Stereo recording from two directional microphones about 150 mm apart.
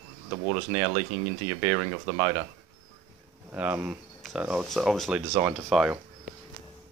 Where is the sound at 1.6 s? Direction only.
15° right (ahead or behind).